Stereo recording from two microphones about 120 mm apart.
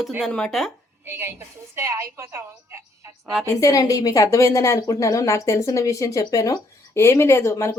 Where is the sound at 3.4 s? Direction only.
25° left (ahead or behind).